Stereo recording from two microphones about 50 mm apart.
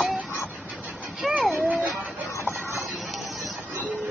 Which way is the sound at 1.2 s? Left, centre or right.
Centre.